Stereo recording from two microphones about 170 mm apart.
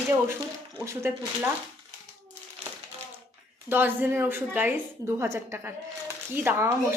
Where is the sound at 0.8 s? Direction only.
15° right (ahead or behind).